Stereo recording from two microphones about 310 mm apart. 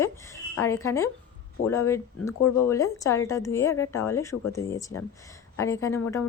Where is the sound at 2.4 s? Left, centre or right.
Left.